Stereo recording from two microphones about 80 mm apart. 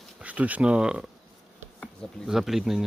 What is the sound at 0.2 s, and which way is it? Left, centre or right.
Speech, centre.